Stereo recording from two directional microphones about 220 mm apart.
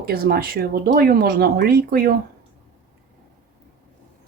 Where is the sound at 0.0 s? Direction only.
45° right (ahead or behind).